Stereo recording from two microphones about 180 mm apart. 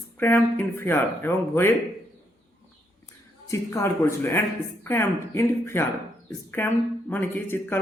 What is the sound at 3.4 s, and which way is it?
Speech, 15° left (ahead or behind).